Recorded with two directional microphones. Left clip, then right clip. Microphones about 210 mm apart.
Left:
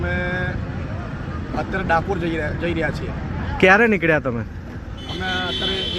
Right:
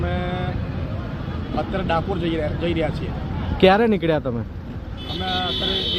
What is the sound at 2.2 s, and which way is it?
Speech, 35° right (ahead or behind).